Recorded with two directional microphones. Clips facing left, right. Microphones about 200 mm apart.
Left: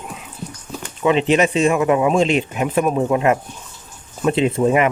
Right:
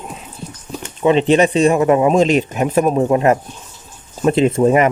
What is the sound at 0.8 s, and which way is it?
Speech, 30° right (ahead or behind).